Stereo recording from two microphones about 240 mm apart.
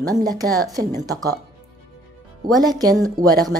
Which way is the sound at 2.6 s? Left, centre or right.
Centre.